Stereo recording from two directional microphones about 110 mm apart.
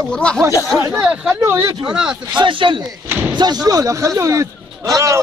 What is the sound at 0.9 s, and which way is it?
Speech, 10° right (ahead or behind).